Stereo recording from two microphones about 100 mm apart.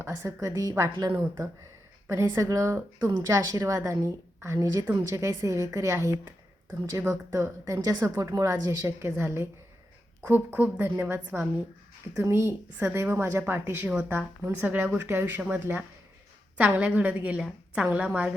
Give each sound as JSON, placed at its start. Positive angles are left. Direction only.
{"t": 0.0, "sound": "speech", "side_deg": -30}
{"t": 2.0, "sound": "a woman's voice", "side_deg": -25}
{"t": 8.6, "sound": "a woman's voice", "side_deg": -20}